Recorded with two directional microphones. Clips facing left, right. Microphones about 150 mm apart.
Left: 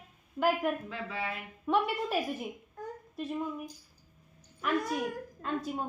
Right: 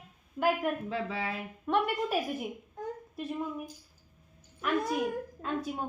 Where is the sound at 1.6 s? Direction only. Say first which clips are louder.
Even; centre (ahead or behind).